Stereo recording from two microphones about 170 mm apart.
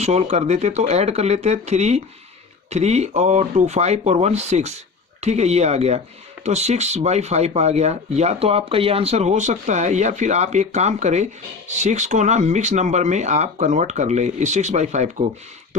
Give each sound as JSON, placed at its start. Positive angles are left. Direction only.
{"t": 0.0, "sound": "speech", "side_deg": -40}